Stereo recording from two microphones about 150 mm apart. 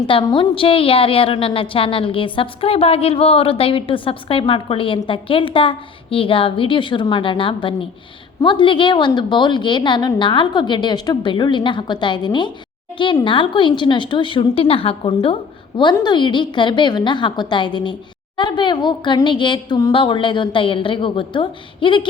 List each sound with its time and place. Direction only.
0.1 s a woman's voice: 35° left (ahead or behind)